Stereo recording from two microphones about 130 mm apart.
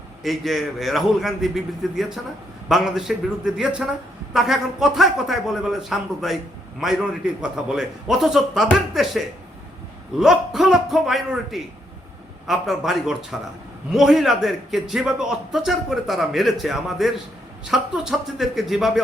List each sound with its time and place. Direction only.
0.2 s a man's voice: centre (ahead or behind)